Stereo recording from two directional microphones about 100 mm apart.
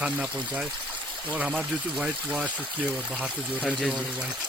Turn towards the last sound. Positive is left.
turn(degrees=0)  # may be behind; listen again after turning